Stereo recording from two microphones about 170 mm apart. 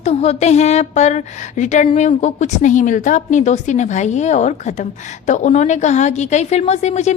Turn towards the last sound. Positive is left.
turn(degrees=40)  # may be behind; listen again after turning